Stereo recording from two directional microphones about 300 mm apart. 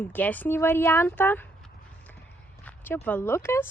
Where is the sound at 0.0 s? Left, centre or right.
Centre.